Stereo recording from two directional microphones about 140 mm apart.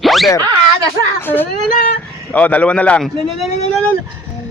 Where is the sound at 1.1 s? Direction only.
15° left (ahead or behind).